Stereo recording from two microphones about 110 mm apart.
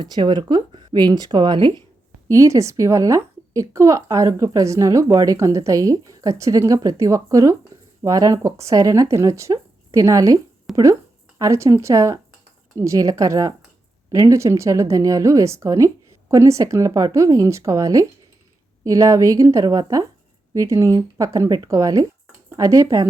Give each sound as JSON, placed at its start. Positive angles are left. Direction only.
{"t": 0.0, "sound": "speech", "side_deg": -45}
{"t": 2.2, "sound": "a woman's voice", "side_deg": -30}
{"t": 7.7, "sound": "a sound", "side_deg": -25}
{"t": 8.0, "sound": "a woman's voice", "side_deg": -30}
{"t": 10.7, "sound": "a sound", "side_deg": 0}
{"t": 11.3, "sound": "a woman's voice", "side_deg": -30}